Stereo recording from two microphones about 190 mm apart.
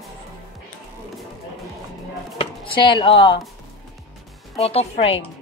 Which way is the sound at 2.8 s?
25° left (ahead or behind).